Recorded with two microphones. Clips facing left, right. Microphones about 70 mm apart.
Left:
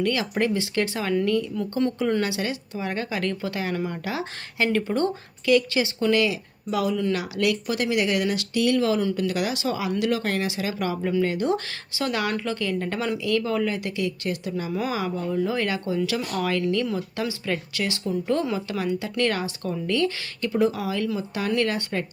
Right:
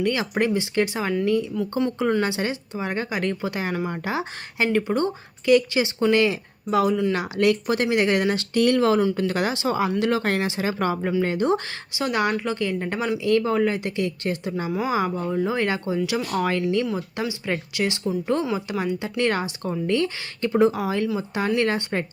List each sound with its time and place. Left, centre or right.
0.0 s speech: right
2.2 s speech: right
13.1 s speech: right